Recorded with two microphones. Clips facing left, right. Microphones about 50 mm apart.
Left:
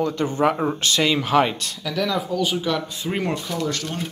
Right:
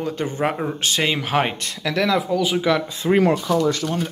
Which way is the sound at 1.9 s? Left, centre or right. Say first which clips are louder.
Right 4 dB; right.